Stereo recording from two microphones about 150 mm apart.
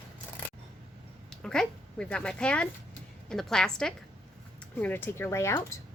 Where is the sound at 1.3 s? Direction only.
5° left (ahead or behind).